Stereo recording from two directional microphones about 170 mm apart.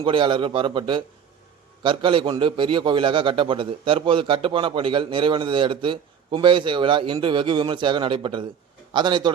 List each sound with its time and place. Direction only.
0.0 s a man's voice: 30° right (ahead or behind)